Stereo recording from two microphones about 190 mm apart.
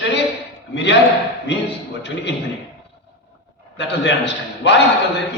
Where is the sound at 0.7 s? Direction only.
65° left (ahead or behind).